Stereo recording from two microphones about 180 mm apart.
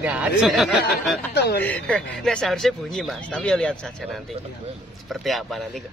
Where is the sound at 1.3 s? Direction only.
60° left (ahead or behind).